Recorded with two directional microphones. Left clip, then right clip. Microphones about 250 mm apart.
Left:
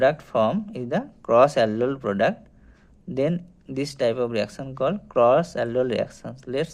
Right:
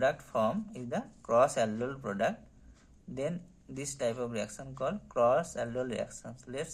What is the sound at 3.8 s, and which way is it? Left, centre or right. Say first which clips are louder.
Speech: left 11 dB; left.